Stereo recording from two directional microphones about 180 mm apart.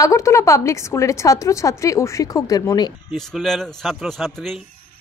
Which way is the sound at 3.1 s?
Centre (ahead or behind).